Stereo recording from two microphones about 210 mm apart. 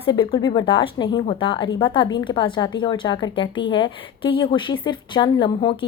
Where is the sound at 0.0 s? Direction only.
25° left (ahead or behind).